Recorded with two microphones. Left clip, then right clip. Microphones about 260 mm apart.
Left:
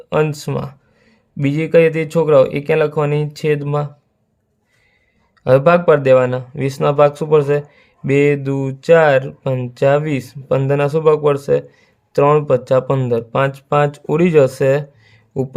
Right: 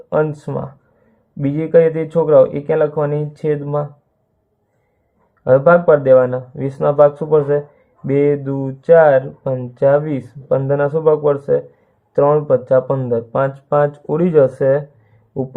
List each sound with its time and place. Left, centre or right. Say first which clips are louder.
0.1 s speech: even; left
5.4 s speech: right 1 dB; left